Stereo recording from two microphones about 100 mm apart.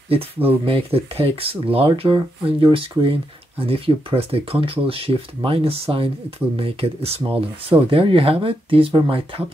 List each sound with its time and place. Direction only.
0.7 s speech: 70° right (ahead or behind)